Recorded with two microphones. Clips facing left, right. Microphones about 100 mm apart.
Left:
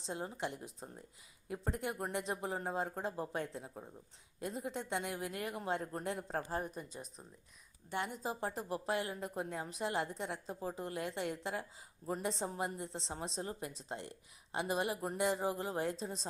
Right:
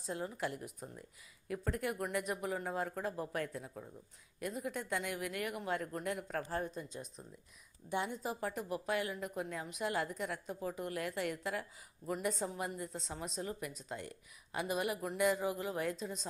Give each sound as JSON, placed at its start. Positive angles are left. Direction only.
{"t": 0.0, "sound": "speech", "side_deg": 25}
{"t": 6.5, "sound": "speech", "side_deg": 10}
{"t": 8.2, "sound": "a woman's voice", "side_deg": 30}